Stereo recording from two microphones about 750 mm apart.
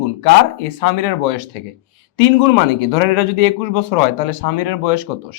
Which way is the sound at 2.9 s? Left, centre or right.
Left.